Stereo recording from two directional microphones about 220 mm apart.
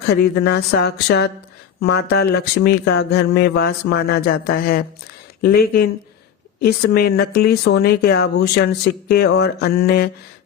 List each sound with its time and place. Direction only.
0.1 s speech: 45° left (ahead or behind)